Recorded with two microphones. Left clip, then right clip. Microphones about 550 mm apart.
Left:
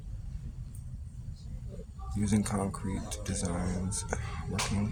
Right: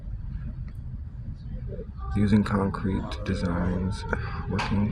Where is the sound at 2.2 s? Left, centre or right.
Left.